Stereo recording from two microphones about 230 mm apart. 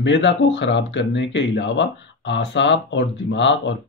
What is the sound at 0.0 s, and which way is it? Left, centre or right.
Speech, left.